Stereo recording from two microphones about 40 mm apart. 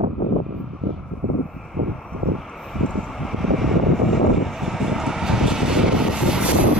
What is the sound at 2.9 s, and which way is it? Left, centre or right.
Vehicle, centre.